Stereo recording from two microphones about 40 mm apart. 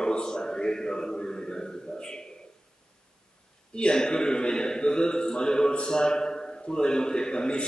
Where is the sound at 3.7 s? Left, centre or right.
Left.